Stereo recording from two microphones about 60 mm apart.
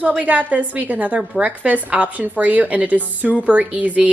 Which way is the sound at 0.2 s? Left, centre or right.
Right.